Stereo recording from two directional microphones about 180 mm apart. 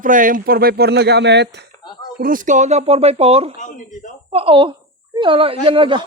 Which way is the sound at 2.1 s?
50° right (ahead or behind).